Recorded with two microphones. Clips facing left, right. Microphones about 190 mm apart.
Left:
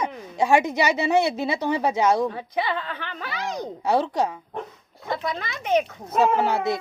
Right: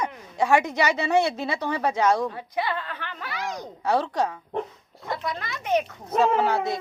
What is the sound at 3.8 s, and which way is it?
Speech, 10° left (ahead or behind).